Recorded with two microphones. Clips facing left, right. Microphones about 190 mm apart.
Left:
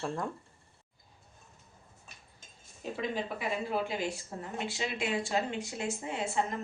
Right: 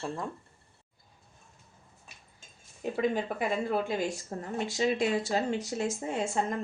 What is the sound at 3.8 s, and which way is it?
A woman's voice, 45° right (ahead or behind).